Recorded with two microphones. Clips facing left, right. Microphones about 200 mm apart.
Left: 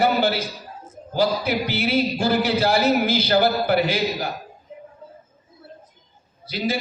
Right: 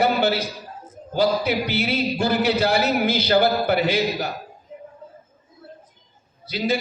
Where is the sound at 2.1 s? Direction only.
60° right (ahead or behind).